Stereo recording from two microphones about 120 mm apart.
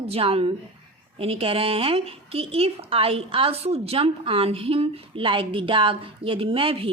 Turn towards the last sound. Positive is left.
turn(degrees=-50)  # may be behind; listen again after turning